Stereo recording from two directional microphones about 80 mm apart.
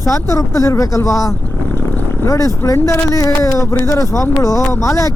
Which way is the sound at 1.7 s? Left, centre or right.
Left.